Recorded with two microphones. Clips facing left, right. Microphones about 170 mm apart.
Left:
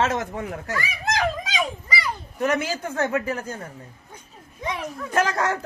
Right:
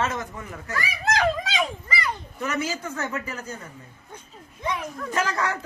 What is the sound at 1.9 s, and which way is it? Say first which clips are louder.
Children playing: left 1 dB; 5° left (ahead or behind).